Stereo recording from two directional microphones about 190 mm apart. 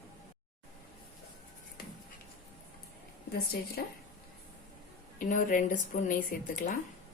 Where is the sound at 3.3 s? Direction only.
55° left (ahead or behind).